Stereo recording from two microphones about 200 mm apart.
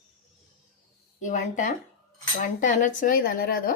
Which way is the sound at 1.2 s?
40° left (ahead or behind).